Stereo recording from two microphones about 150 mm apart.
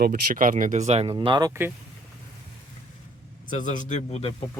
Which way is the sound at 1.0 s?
30° right (ahead or behind).